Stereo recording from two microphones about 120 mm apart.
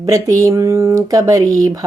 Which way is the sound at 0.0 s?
30° right (ahead or behind).